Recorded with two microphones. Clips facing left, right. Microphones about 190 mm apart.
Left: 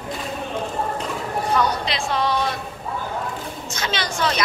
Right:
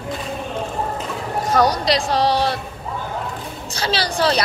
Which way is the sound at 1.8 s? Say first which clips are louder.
Right 5 dB; 35° right (ahead or behind).